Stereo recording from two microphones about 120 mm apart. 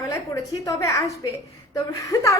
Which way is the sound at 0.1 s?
30° left (ahead or behind).